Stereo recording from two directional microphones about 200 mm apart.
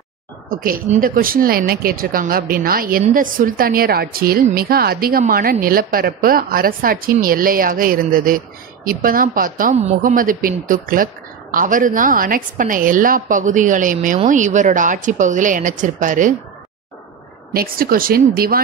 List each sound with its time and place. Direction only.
0.5 s a woman's voice: 45° right (ahead or behind)
17.5 s a woman's voice: 45° right (ahead or behind)